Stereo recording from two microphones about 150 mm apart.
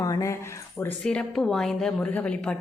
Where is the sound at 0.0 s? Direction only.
20° left (ahead or behind).